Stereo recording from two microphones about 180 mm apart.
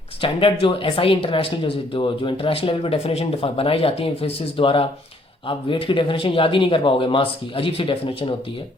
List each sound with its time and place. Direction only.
0.2 s speech: 30° left (ahead or behind)